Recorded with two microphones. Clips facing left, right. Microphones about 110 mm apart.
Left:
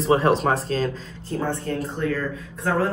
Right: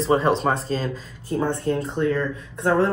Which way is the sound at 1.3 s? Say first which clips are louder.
Right 3 dB; 15° right (ahead or behind).